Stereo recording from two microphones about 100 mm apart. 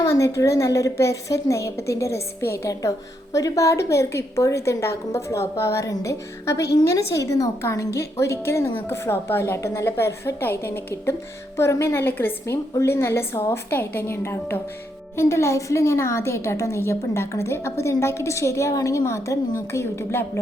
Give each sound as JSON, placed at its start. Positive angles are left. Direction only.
{"t": 0.0, "sound": "a woman's voice", "side_deg": 30}